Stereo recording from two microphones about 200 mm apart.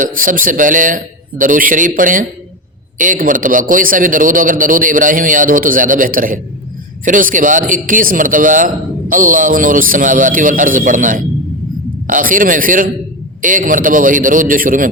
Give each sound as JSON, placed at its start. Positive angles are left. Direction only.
{"t": 0.0, "sound": "a man's voice", "side_deg": -40}